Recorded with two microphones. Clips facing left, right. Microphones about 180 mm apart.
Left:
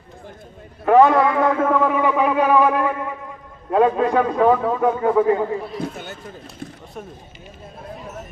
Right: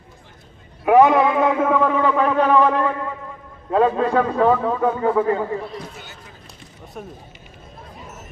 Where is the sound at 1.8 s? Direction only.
10° left (ahead or behind).